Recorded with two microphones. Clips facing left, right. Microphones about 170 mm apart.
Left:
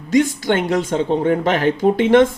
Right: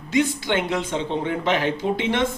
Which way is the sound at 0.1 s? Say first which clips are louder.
Left 5 dB; 45° left (ahead or behind).